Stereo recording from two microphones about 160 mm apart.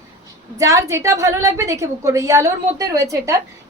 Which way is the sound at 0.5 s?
20° right (ahead or behind).